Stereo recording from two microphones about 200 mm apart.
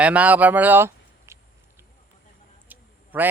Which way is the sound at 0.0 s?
5° right (ahead or behind).